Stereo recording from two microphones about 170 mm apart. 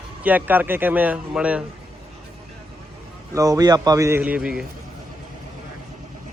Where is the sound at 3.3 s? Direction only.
20° right (ahead or behind).